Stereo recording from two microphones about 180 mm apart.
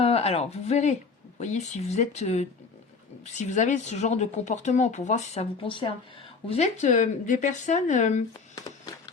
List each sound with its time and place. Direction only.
0.0 s speech: 35° left (ahead or behind)
6.5 s speech: 40° left (ahead or behind)